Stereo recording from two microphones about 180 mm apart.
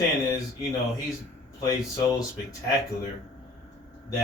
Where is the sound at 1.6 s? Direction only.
20° left (ahead or behind).